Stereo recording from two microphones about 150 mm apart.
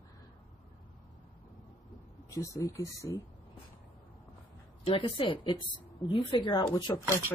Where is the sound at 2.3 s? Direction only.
20° left (ahead or behind).